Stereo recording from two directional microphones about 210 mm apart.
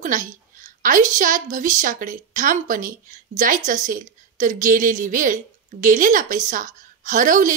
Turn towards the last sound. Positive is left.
turn(degrees=-40)  # may be behind; listen again after turning